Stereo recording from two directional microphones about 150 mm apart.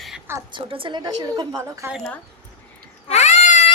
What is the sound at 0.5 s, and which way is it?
A woman's voice, 35° right (ahead or behind).